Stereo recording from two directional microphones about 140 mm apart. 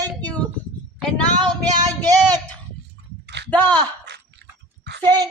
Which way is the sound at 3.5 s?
10° left (ahead or behind).